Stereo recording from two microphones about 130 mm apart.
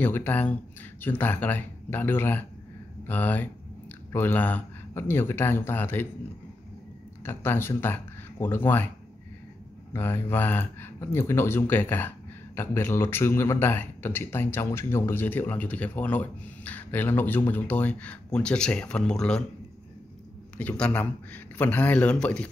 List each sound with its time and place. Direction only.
0.0 s speech: 15° left (ahead or behind)
7.2 s speech: 15° left (ahead or behind)
9.9 s speech: 15° left (ahead or behind)
20.5 s speech: 10° left (ahead or behind)